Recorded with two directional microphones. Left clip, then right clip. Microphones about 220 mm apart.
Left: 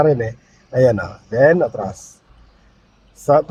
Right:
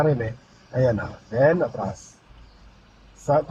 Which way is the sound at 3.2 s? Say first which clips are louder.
Left 7 dB; 45° left (ahead or behind).